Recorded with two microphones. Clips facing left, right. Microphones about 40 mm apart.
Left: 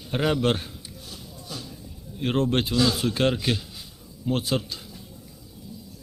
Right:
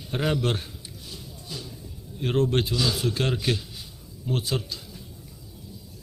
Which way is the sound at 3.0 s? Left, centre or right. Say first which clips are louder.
Left 3 dB; left.